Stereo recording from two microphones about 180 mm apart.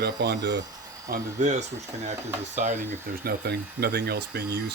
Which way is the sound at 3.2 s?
65° right (ahead or behind).